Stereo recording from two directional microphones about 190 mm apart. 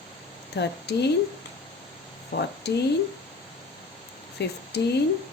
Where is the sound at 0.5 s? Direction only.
60° left (ahead or behind).